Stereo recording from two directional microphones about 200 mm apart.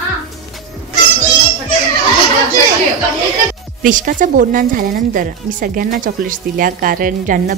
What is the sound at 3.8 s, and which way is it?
A woman's voice, 40° right (ahead or behind).